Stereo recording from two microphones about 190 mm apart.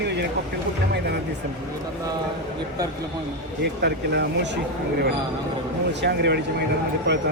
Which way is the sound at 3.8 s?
60° right (ahead or behind).